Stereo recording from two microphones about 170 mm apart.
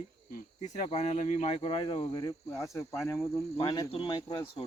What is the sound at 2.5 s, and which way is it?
Speech, 15° left (ahead or behind).